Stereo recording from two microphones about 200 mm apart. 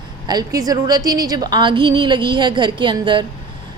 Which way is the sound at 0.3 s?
20° right (ahead or behind).